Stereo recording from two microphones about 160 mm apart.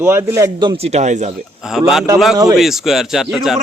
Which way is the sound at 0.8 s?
45° right (ahead or behind).